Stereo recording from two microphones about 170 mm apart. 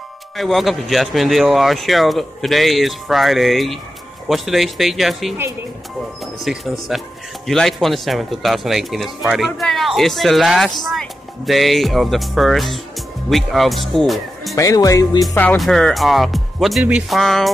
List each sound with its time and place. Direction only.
0.4 s speech: centre (ahead or behind)
6.4 s speech: centre (ahead or behind)
14.5 s speech: 20° left (ahead or behind)
15.3 s speech: 5° left (ahead or behind)